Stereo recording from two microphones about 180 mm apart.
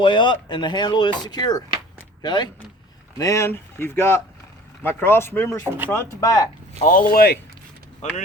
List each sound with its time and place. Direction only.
0.0 s speech: 25° left (ahead or behind)
6.8 s speech: 35° right (ahead or behind)
7.1 s speech: 55° left (ahead or behind)
8.0 s speech: 40° left (ahead or behind)